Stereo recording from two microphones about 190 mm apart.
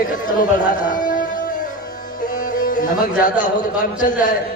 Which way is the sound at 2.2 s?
45° left (ahead or behind).